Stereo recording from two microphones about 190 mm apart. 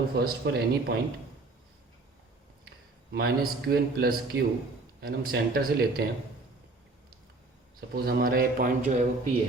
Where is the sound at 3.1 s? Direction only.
60° right (ahead or behind).